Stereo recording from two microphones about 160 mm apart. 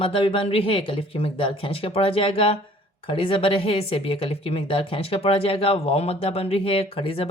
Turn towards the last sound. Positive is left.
turn(degrees=35)  # may be behind; listen again after turning